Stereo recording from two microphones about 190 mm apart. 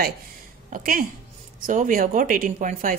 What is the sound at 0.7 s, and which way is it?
A woman's voice, 45° right (ahead or behind).